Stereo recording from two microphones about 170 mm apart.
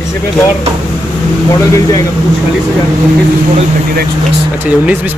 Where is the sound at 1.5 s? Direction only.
20° left (ahead or behind).